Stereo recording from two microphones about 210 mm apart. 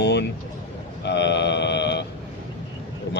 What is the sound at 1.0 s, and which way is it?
Mantra, 55° left (ahead or behind).